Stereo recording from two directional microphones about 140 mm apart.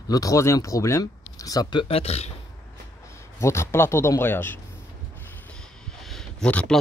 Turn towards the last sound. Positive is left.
turn(degrees=10)  # may be behind; listen again after turning